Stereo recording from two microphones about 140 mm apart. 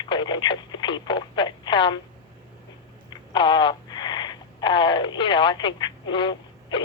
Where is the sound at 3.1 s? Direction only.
35° left (ahead or behind).